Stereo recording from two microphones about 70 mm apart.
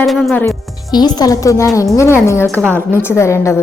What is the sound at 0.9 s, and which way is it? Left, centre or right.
A woman's voice, left.